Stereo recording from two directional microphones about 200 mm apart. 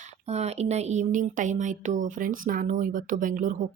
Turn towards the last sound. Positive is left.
turn(degrees=-40)  # may be behind; listen again after turning